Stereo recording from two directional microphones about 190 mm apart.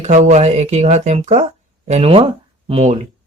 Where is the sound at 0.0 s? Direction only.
40° right (ahead or behind).